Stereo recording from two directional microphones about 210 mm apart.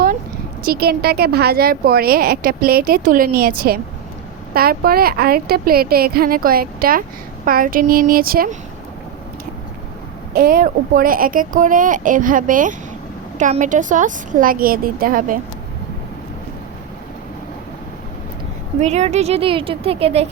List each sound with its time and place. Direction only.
0.6 s a woman's voice: 45° right (ahead or behind)
10.3 s speech: 40° right (ahead or behind)
18.8 s a woman's voice: 30° right (ahead or behind)